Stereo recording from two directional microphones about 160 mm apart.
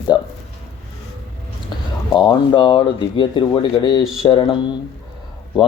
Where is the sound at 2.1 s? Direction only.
25° left (ahead or behind).